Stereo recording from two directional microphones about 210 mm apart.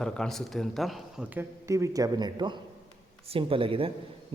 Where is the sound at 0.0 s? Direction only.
5° left (ahead or behind).